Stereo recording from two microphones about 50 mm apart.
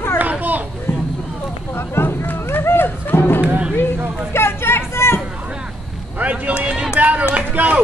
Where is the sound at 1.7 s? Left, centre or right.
Left.